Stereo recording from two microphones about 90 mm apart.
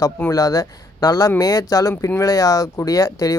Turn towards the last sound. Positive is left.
turn(degrees=40)  # may be behind; listen again after turning